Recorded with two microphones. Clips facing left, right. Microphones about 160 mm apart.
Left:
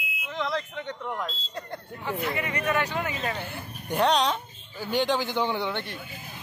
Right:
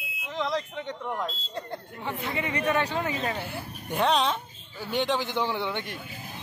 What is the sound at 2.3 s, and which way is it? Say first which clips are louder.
Speech: right 4 dB; 25° right (ahead or behind).